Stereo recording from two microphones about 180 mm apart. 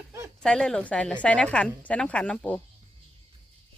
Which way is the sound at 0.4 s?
5° left (ahead or behind).